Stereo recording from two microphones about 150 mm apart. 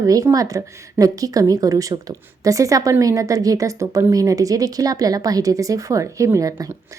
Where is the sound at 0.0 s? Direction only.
25° right (ahead or behind).